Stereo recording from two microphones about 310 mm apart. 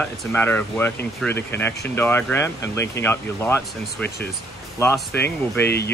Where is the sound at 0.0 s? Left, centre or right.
Centre.